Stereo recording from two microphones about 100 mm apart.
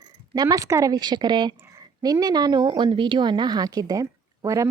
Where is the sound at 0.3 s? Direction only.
35° right (ahead or behind).